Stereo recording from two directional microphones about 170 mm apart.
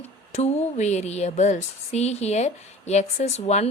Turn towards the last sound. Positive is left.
turn(degrees=40)  # may be behind; listen again after turning